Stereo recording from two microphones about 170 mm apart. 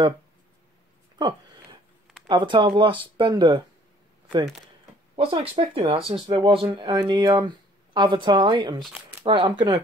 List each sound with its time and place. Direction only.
2.2 s speech: 30° right (ahead or behind)
5.1 s speech: 30° right (ahead or behind)